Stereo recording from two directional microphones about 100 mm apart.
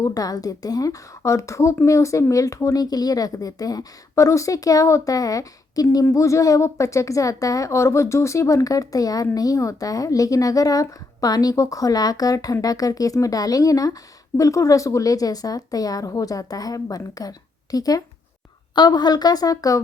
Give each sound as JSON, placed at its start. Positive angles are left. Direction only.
{"t": 0.0, "sound": "a woman's voice", "side_deg": 35}